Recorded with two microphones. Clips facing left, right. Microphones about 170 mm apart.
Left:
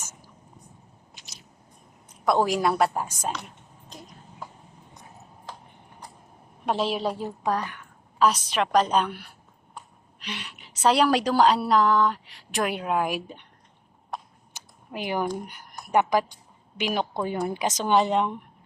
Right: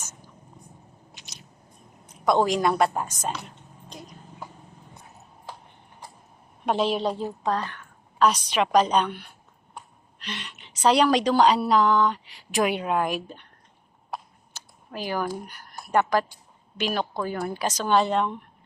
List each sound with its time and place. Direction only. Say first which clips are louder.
0.0 s whispering: even; 10° left (ahead or behind)
2.2 s speech: right 1 dB; 5° left (ahead or behind)
6.7 s speech: right 2 dB; centre (ahead or behind)
8.2 s speech: right 1 dB; centre (ahead or behind)
10.2 s a woman's voice: even; 10° left (ahead or behind)
14.1 s a sound: even; centre (ahead or behind)
14.5 s a sound: left 1 dB; 20° left (ahead or behind)
15.4 s speech: even; 20° left (ahead or behind)